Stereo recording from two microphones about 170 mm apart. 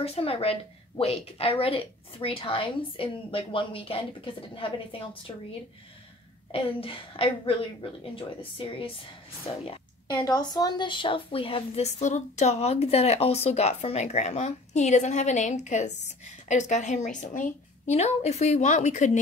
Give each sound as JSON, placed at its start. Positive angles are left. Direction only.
{"t": 0.0, "sound": "a woman's voice", "side_deg": 35}
{"t": 6.5, "sound": "a woman's voice", "side_deg": 35}